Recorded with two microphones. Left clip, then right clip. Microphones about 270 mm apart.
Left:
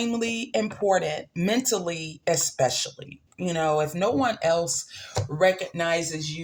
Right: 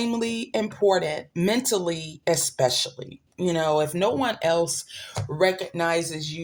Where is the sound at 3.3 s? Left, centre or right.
Right.